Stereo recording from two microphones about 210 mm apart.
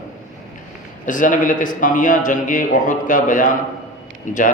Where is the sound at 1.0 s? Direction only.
40° left (ahead or behind).